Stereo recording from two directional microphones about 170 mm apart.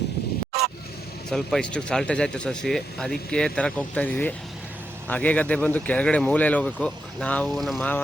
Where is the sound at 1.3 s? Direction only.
Centre (ahead or behind).